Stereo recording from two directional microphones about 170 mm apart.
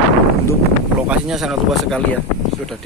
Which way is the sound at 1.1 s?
5° right (ahead or behind).